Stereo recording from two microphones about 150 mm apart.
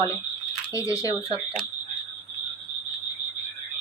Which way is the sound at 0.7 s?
25° left (ahead or behind).